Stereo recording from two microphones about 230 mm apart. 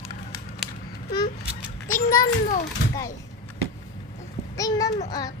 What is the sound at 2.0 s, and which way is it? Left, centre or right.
Speech, left.